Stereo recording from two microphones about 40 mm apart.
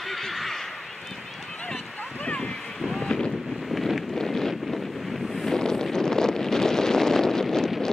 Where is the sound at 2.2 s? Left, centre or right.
Left.